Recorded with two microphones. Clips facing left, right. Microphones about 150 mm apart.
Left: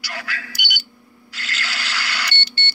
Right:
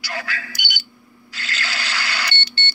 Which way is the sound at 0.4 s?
5° left (ahead or behind).